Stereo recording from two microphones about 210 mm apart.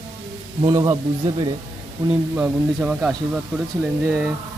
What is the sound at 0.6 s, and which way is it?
Speech, 20° right (ahead or behind).